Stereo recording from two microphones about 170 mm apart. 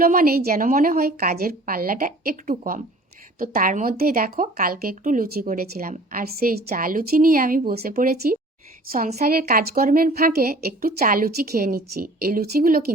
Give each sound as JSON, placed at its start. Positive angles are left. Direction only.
{"t": 0.0, "sound": "a woman's voice", "side_deg": -55}